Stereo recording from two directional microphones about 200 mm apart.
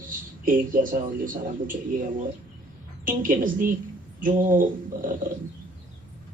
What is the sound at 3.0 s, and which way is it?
A man's voice, 40° right (ahead or behind).